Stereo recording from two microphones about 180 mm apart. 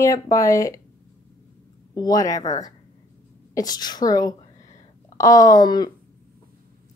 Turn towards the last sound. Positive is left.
turn(degrees=20)  # may be behind; listen again after turning